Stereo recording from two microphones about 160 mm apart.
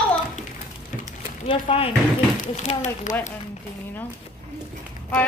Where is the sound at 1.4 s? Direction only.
35° left (ahead or behind).